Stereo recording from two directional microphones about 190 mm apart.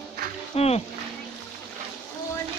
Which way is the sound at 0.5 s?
35° left (ahead or behind).